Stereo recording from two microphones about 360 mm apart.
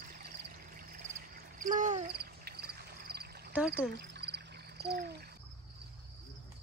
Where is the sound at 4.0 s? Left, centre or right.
Right.